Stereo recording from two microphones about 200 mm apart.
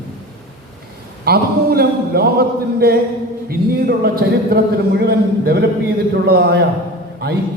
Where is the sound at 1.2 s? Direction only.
50° right (ahead or behind).